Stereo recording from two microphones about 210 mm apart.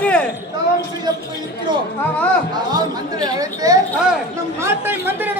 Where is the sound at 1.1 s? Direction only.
20° right (ahead or behind).